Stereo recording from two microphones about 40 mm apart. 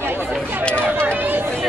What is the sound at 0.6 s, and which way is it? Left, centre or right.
Speech, left.